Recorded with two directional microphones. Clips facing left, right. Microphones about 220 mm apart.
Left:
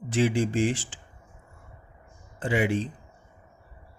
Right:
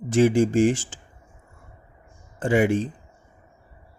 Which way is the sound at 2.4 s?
45° right (ahead or behind).